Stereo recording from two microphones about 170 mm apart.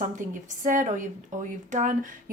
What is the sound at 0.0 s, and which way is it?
A woman's voice, 50° right (ahead or behind).